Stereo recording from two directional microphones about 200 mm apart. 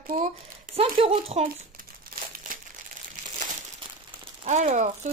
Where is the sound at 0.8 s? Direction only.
25° right (ahead or behind).